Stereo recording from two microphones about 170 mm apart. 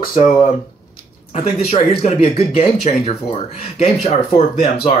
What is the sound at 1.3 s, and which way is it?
Speech, 40° left (ahead or behind).